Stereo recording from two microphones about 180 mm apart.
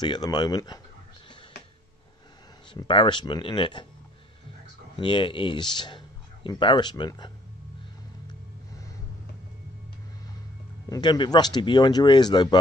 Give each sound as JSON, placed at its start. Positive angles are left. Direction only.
{"t": 0.0, "sound": "speech", "side_deg": 25}
{"t": 2.7, "sound": "speech", "side_deg": 25}
{"t": 4.9, "sound": "speech", "side_deg": 25}
{"t": 10.9, "sound": "speech", "side_deg": 25}